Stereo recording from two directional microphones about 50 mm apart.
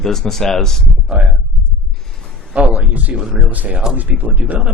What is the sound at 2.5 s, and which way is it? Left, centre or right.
A man's voice, right.